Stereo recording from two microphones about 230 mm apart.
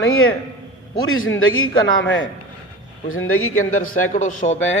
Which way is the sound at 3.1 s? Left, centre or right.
Left.